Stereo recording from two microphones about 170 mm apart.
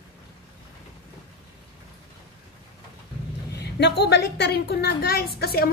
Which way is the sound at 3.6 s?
80° left.